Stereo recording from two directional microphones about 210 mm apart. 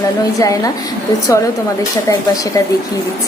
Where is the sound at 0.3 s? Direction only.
15° left (ahead or behind).